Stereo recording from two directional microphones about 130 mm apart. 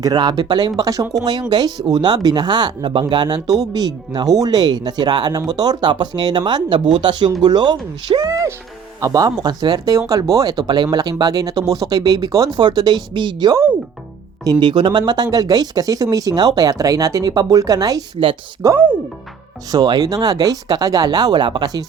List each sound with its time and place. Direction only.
0.0 s speech: 35° right (ahead or behind)
8.2 s speech: 25° right (ahead or behind)